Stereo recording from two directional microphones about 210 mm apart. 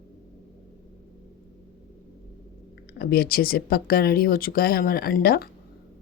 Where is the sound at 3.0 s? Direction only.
45° left (ahead or behind).